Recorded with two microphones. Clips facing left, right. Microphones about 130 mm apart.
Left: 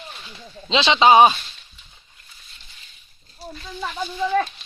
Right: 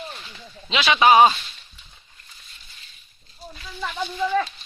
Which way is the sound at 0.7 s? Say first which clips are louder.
Left 2 dB; 25° left (ahead or behind).